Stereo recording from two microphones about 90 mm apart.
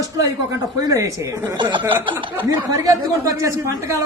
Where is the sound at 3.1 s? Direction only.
35° right (ahead or behind).